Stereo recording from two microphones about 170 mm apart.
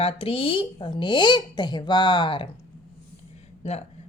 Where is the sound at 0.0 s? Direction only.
35° left (ahead or behind).